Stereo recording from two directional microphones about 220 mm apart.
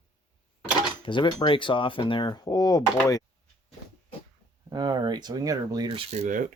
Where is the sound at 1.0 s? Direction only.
20° left (ahead or behind).